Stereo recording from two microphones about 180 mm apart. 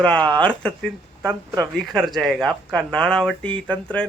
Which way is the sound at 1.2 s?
15° right (ahead or behind).